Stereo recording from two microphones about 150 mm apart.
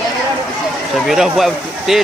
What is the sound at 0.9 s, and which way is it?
A man's voice, centre (ahead or behind).